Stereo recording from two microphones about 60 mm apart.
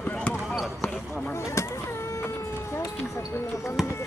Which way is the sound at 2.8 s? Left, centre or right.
Left.